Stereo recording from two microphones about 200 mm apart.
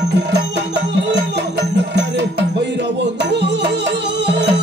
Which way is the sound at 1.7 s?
60° right (ahead or behind).